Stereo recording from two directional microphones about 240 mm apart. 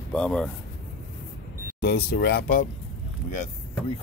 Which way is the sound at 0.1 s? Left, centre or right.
Centre.